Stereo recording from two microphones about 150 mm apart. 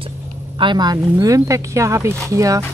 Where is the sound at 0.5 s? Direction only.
30° right (ahead or behind).